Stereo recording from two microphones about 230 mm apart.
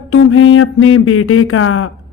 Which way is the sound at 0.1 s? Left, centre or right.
Left.